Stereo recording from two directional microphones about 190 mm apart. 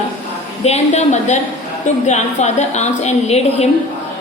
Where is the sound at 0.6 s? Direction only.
35° left (ahead or behind).